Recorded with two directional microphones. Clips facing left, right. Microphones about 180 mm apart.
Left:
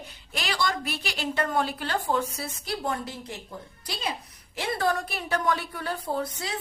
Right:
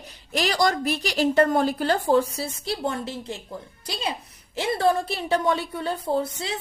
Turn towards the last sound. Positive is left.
turn(degrees=-25)  # may be behind; listen again after turning